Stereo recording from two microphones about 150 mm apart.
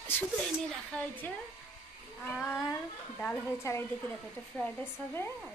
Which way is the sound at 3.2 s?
15° left (ahead or behind).